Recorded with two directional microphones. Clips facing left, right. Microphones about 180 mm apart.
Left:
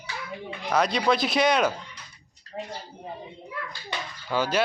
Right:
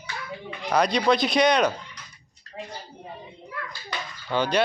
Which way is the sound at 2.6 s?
40° left (ahead or behind).